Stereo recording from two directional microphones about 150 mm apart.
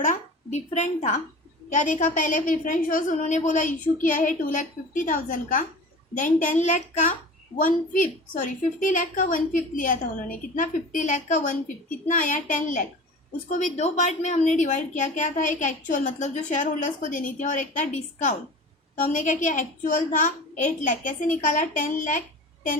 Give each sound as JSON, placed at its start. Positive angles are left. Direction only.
{"t": 0.0, "sound": "a woman's voice", "side_deg": 50}
{"t": 7.5, "sound": "a woman's voice", "side_deg": 65}